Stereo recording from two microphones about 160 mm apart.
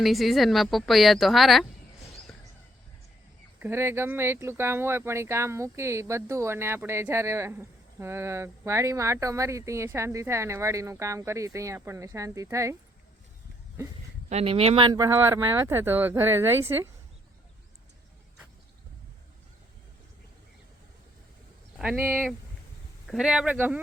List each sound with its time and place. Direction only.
0.0 s speech: centre (ahead or behind)
3.6 s speech: 15° right (ahead or behind)
14.3 s speech: 40° right (ahead or behind); by 16.9 s 15° right (ahead or behind)
21.8 s speech: 5° right (ahead or behind)
23.0 s speech: 5° right (ahead or behind)